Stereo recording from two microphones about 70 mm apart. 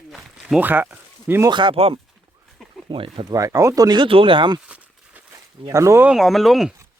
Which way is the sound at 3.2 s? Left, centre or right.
Right.